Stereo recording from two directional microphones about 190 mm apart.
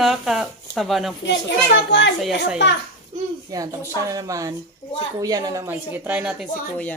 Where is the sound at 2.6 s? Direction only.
70° left (ahead or behind).